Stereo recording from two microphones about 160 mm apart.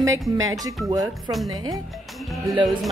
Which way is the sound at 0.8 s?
25° right (ahead or behind).